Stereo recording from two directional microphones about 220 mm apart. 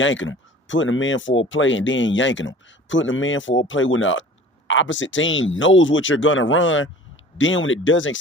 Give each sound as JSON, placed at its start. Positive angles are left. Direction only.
{"t": 0.0, "sound": "speech", "side_deg": 60}